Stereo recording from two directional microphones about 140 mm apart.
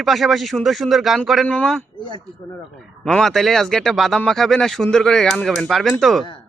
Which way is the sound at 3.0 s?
Centre (ahead or behind).